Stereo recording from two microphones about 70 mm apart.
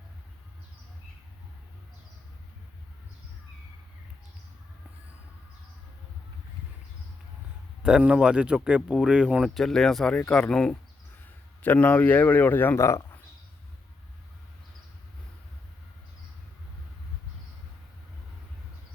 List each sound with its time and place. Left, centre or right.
7.8 s speech: centre
9.4 s speech: centre
11.6 s speech: left